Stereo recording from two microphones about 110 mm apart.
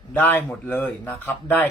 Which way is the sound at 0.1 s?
15° left (ahead or behind).